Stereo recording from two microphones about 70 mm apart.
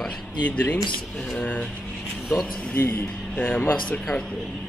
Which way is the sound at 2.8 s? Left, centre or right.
Left.